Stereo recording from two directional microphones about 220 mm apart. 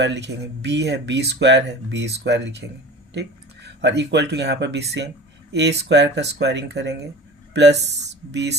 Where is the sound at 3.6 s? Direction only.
50° right (ahead or behind).